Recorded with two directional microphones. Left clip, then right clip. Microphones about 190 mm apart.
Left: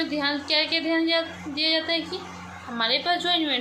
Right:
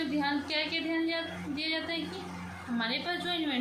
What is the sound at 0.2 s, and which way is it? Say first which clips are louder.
A woman's voice: left 8 dB; 30° left (ahead or behind).